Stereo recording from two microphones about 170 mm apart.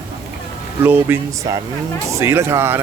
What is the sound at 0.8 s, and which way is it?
Speech, 10° right (ahead or behind).